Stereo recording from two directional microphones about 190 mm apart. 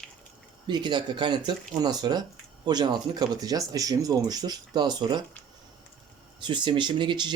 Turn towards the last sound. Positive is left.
turn(degrees=-25)  # may be behind; listen again after turning